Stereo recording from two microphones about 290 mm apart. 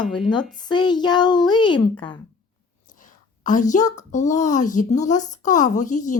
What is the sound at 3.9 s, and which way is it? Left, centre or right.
Speech, left.